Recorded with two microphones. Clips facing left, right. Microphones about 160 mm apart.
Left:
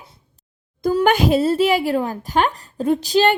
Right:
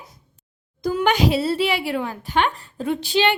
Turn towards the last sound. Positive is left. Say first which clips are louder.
# left 4 dB
turn(degrees=40)  # may be behind; listen again after turning